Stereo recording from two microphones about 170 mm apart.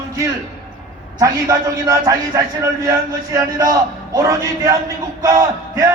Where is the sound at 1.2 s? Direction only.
20° right (ahead or behind).